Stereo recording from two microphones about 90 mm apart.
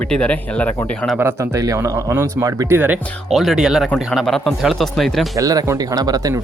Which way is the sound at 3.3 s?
Centre (ahead or behind).